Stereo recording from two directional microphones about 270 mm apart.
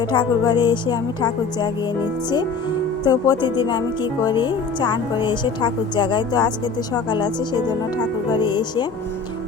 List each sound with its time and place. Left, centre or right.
0.0 s speech: centre
3.0 s speech: centre